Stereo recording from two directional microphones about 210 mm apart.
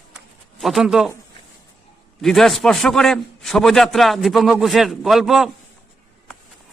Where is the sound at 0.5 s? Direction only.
Centre (ahead or behind).